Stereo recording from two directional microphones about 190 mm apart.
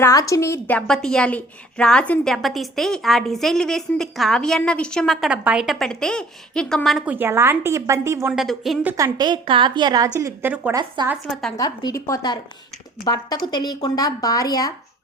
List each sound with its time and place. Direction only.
0.0 s a woman's voice: 15° left (ahead or behind); by 8.3 s 15° right (ahead or behind)
8.3 s a woman's voice: centre (ahead or behind)
10.8 s a woman's voice: 20° right (ahead or behind)
11.3 s a woman's voice: 5° left (ahead or behind)
11.5 s speech: 20° left (ahead or behind)